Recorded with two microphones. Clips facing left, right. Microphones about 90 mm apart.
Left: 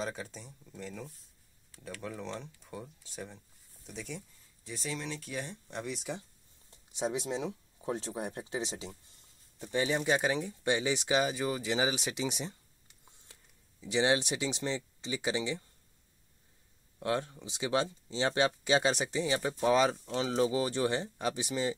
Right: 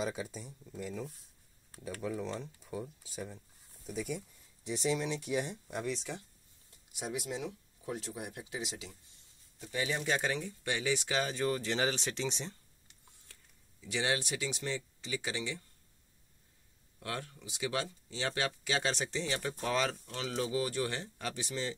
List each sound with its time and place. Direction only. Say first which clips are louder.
0.0 s speech: right 1 dB; 5° right (ahead or behind)
4.6 s speech: right 6 dB; 20° right (ahead or behind)
5.8 s speech: right 2 dB; 5° left (ahead or behind)
6.7 s speech: left 6 dB; 25° left (ahead or behind); by 12.5 s 10° left (ahead or behind)
13.3 s speech: left 1 dB; 20° left (ahead or behind)
17.0 s speech: left 8 dB; 25° left (ahead or behind)